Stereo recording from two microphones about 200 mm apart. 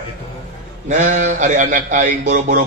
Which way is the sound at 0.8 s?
35° right (ahead or behind).